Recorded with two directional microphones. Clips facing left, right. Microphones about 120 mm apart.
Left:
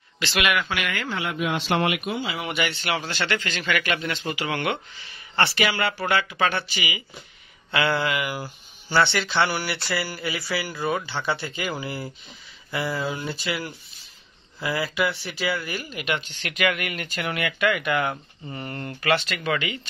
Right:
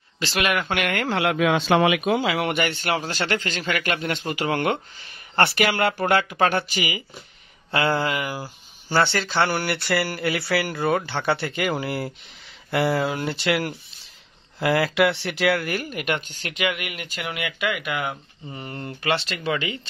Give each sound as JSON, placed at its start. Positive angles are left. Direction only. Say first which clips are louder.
{"t": 0.2, "sound": "a man's voice", "louder": "right 1 dB", "side_deg": -35}
{"t": 2.5, "sound": "a man's voice", "louder": "right 3 dB", "side_deg": -45}
{"t": 7.7, "sound": "a sound", "louder": "right 1 dB", "side_deg": -35}
{"t": 8.8, "sound": "speech", "louder": "even", "side_deg": -40}
{"t": 16.5, "sound": "speech", "louder": "left 2 dB", "side_deg": -15}
{"t": 19.1, "sound": "speech", "louder": "even", "side_deg": -30}